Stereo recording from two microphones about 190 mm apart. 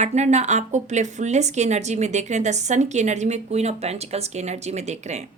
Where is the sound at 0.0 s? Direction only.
35° right (ahead or behind).